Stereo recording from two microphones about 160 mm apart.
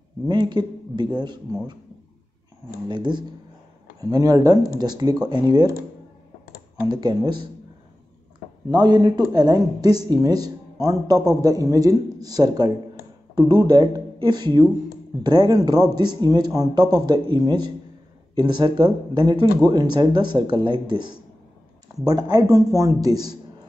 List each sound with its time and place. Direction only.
0.3 s speech: 25° right (ahead or behind)
2.9 s speech: 30° right (ahead or behind)
6.9 s speech: 25° right (ahead or behind)
8.6 s speech: 25° right (ahead or behind)